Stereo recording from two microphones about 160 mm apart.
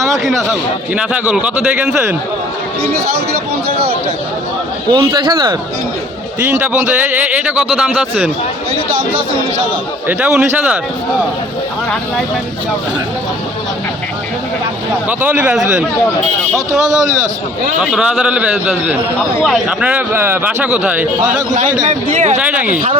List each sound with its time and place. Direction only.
0.9 s a man's voice: 10° right (ahead or behind)
4.9 s speech: 25° right (ahead or behind)
6.5 s a man's voice: 10° right (ahead or behind)
10.1 s a man's voice: 5° right (ahead or behind)
15.2 s a man's voice: 10° right (ahead or behind)
17.7 s a man's voice: 5° right (ahead or behind)
21.2 s speech: 55° right (ahead or behind)
22.4 s a man's voice: 10° right (ahead or behind)